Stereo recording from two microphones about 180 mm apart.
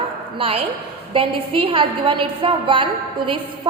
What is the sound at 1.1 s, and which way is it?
A woman's voice, 30° right (ahead or behind).